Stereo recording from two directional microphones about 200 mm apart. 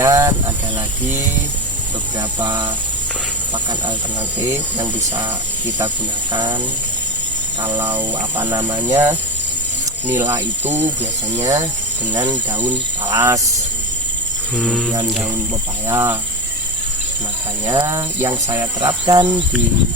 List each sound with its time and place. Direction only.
0.0 s vehicle: 15° right (ahead or behind)
2.4 s speech: 25° right (ahead or behind)
6.3 s speech: 20° right (ahead or behind)
7.6 s speech: 10° right (ahead or behind)
14.5 s speech: centre (ahead or behind)
15.9 s speech: 15° right (ahead or behind)
17.7 s speech: 20° right (ahead or behind)